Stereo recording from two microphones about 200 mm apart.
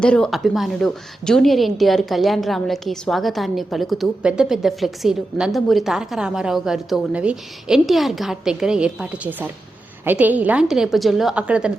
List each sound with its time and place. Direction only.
0.0 s a woman's voice: 5° left (ahead or behind)